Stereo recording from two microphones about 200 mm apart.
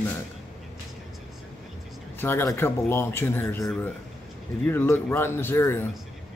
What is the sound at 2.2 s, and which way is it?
Speech, 10° left (ahead or behind).